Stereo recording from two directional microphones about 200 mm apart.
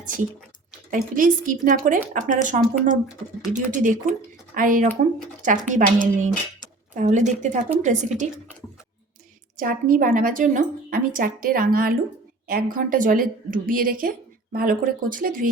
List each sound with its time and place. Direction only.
0.9 s a woman's voice: 45° right (ahead or behind)
9.6 s a woman's voice: 45° right (ahead or behind)